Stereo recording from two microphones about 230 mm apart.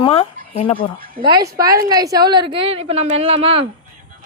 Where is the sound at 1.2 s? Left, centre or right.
Centre.